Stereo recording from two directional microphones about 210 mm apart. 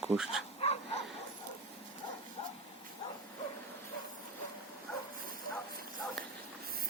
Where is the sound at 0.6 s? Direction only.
30° left (ahead or behind).